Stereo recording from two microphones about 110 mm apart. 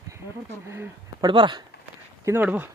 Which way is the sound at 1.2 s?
45° right (ahead or behind).